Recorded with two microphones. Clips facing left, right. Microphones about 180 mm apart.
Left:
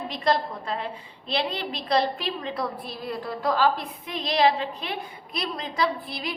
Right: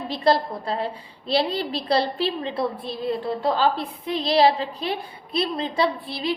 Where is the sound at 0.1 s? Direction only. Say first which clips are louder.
Right 5 dB; 35° right (ahead or behind).